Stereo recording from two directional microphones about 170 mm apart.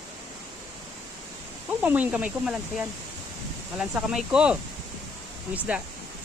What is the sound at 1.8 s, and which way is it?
Speech, 10° right (ahead or behind).